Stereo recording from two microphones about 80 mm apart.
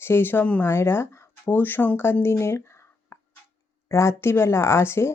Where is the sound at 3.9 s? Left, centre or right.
Left.